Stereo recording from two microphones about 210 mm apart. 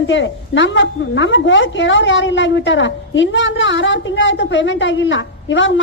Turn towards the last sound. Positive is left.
turn(degrees=65)  # may be behind; listen again after turning